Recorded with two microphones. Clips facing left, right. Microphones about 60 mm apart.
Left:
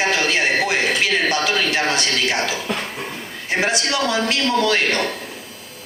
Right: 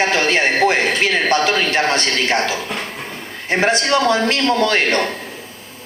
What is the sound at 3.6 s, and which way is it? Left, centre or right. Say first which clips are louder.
A man's voice: right 5 dB; right.